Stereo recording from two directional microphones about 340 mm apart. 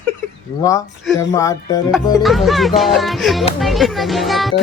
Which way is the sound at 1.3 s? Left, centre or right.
Centre.